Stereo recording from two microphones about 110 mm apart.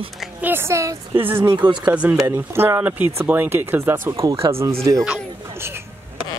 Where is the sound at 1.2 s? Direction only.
20° right (ahead or behind).